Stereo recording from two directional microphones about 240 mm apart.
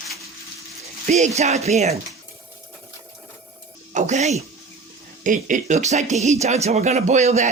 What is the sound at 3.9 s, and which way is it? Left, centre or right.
Speech, right.